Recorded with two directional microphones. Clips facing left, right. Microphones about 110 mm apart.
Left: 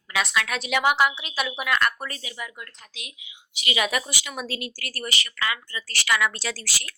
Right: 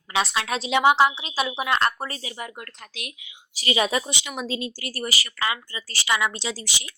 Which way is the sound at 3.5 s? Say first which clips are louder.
Right 3 dB; 35° right (ahead or behind).